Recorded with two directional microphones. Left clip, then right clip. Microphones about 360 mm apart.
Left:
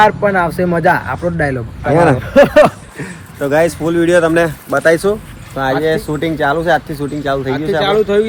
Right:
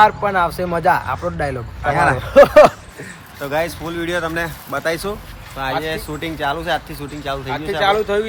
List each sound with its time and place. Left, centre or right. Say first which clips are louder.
0.0 s speech: left 3 dB; centre
2.2 s speech: right 2 dB; centre
3.4 s speech: left 8 dB; centre